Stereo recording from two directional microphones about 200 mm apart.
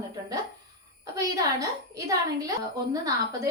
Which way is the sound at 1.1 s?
15° right (ahead or behind).